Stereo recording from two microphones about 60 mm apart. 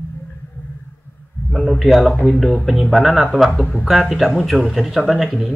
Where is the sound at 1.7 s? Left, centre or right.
Centre.